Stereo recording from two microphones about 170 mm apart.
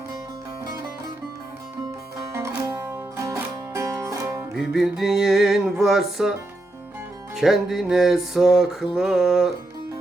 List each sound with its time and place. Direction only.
2.3 s music: 15° right (ahead or behind)
4.5 s music: centre (ahead or behind)
7.3 s music: centre (ahead or behind)